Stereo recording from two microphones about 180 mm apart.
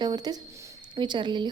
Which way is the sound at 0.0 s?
25° right (ahead or behind).